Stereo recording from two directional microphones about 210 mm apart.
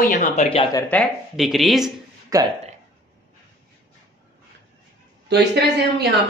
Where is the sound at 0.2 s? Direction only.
30° left (ahead or behind).